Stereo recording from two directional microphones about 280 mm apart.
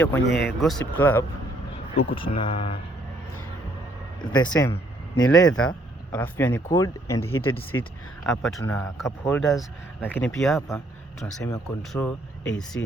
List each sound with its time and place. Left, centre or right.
0.0 s speech: centre
2.0 s speech: centre
4.2 s speech: centre
5.1 s speech: left
5.5 s speech: centre